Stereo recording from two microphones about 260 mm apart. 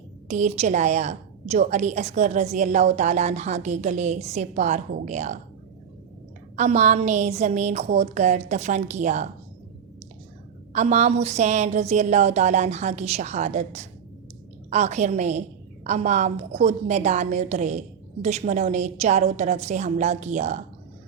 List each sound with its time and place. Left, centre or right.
0.3 s a woman's voice: right
6.6 s a woman's voice: right
10.7 s a woman's voice: right